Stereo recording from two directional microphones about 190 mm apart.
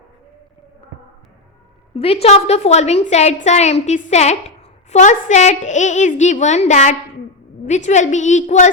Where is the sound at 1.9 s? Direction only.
30° left (ahead or behind).